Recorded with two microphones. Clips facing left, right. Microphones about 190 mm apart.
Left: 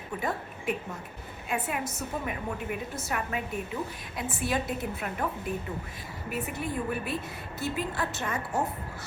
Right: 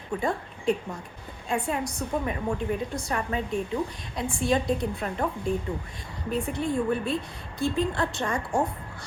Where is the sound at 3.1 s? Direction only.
30° right (ahead or behind).